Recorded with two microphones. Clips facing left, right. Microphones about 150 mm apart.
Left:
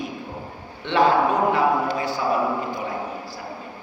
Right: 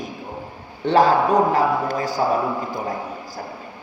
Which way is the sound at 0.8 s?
40° right (ahead or behind).